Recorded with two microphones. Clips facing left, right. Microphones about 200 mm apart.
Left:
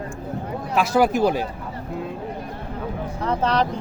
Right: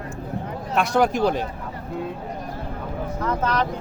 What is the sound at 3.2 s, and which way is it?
Speech, 30° left (ahead or behind).